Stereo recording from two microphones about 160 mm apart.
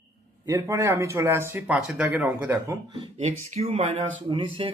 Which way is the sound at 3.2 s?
45° right (ahead or behind).